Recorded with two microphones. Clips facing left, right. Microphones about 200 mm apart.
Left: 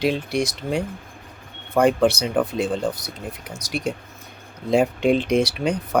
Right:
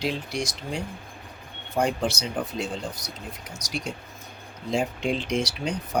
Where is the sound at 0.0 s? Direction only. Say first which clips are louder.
Left 7 dB; 60° left (ahead or behind).